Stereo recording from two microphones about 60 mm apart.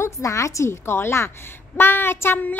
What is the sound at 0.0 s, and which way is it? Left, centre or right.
A woman's voice, left.